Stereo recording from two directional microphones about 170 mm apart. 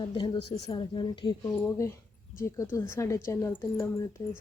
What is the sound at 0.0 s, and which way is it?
A woman's voice, 30° left (ahead or behind).